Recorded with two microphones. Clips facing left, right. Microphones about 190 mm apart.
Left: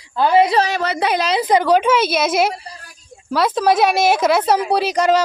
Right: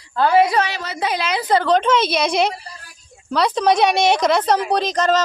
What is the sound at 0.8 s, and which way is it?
Speech, 65° left (ahead or behind).